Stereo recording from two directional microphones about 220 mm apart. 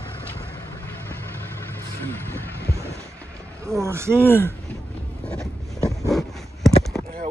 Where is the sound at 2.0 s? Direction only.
10° left (ahead or behind).